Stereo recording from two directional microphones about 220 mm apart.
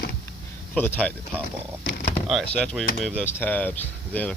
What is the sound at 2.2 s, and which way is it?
Speech, centre (ahead or behind).